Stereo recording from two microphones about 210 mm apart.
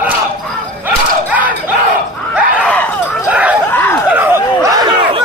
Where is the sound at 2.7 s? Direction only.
5° left (ahead or behind).